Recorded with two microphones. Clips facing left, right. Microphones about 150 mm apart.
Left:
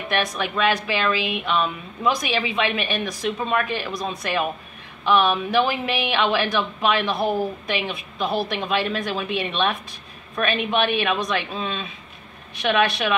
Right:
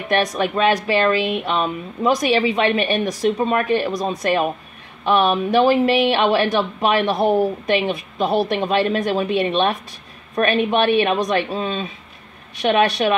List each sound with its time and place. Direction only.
0.1 s speech: 40° right (ahead or behind)
3.8 s speech: 40° right (ahead or behind)